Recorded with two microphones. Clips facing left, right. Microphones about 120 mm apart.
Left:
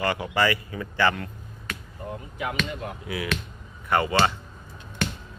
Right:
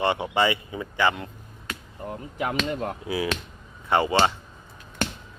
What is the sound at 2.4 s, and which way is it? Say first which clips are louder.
Speech: right 4 dB; 35° right (ahead or behind).